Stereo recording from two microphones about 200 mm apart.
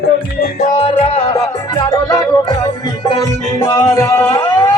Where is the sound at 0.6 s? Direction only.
30° left (ahead or behind).